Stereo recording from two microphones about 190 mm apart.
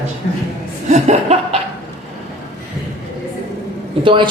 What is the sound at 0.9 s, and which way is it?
Speech, 35° right (ahead or behind).